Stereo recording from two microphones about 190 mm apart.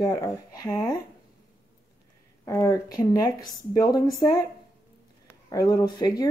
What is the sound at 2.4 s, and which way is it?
Speech, 15° left (ahead or behind).